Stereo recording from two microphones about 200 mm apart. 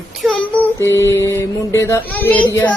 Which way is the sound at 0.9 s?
15° left (ahead or behind).